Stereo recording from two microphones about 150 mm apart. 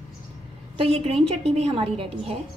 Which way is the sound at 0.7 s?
40° right (ahead or behind).